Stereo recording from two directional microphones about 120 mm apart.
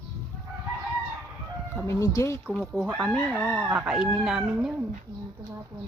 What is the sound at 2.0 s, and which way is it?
Speech, 25° left (ahead or behind).